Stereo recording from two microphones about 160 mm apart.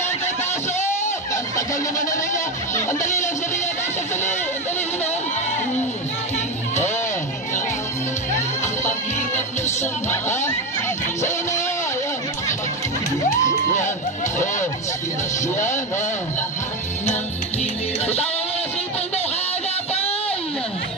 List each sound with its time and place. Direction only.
1.3 s music: 20° left (ahead or behind)
6.3 s music: 45° left (ahead or behind)
10.4 s music: 15° left (ahead or behind)
13.4 s music: 50° left (ahead or behind)
19.9 s a sound: 40° left (ahead or behind)